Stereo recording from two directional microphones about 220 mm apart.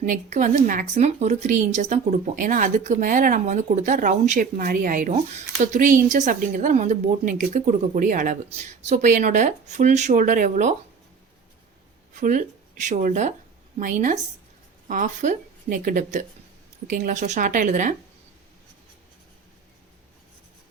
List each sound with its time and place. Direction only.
0.0 s a woman's voice: 35° right (ahead or behind)
12.1 s a woman's voice: 35° right (ahead or behind)